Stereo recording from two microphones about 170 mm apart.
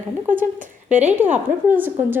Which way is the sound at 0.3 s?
50° right (ahead or behind).